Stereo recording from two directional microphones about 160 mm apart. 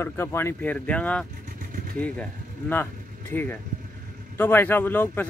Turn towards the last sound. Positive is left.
turn(degrees=10)  # may be behind; listen again after turning